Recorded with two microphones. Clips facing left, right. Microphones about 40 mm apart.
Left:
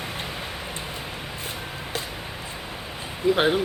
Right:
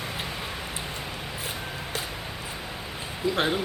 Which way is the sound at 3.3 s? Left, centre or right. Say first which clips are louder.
Left 4 dB; left.